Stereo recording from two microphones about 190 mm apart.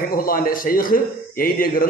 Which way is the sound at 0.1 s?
50° left (ahead or behind).